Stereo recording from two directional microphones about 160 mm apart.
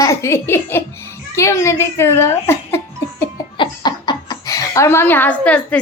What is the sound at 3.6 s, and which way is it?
Speech, 30° left (ahead or behind).